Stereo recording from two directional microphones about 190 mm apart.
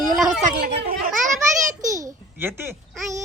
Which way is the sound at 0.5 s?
50° right (ahead or behind).